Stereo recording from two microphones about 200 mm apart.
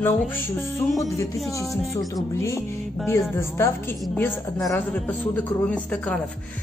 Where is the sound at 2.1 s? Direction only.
15° left (ahead or behind).